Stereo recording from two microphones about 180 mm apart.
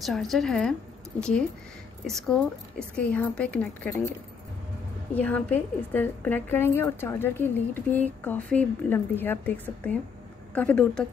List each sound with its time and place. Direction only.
0.0 s a woman's voice: centre (ahead or behind)
2.0 s a woman's voice: 5° left (ahead or behind)
5.1 s a woman's voice: 10° left (ahead or behind)